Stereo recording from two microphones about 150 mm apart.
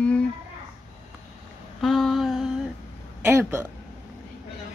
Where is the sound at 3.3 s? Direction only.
15° right (ahead or behind).